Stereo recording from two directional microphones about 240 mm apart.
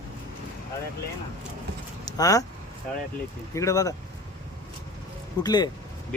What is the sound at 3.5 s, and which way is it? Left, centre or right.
Speech, centre.